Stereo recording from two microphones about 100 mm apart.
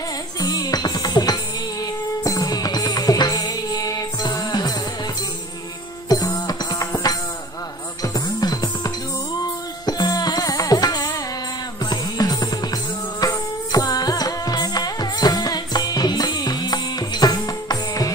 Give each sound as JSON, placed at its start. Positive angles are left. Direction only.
{"t": 0.4, "sound": "music", "side_deg": 40}
{"t": 6.0, "sound": "music", "side_deg": 40}